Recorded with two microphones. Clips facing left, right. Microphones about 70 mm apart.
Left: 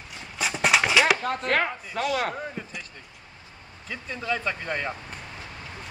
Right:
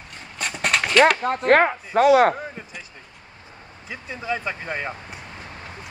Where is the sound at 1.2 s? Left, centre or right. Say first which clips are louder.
Right 8 dB; right.